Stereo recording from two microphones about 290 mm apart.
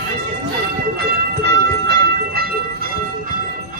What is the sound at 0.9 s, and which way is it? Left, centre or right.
Train, right.